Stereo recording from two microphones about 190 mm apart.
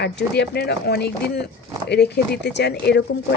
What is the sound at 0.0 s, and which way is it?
Speech, 60° left (ahead or behind).